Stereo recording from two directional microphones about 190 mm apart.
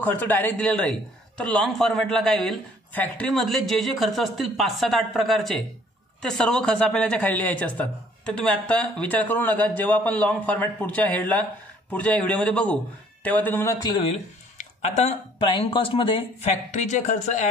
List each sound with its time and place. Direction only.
0.0 s a man's voice: 10° left (ahead or behind)
14.0 s speech: 35° left (ahead or behind)
16.7 s speech: 40° left (ahead or behind)